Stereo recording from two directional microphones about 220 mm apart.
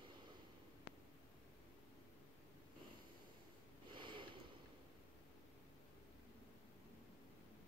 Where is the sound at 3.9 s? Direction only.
20° right (ahead or behind).